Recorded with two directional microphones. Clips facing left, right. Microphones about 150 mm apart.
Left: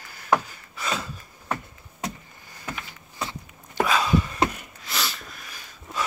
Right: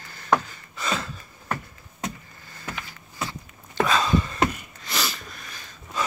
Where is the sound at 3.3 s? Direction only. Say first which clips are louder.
Even; 10° left (ahead or behind).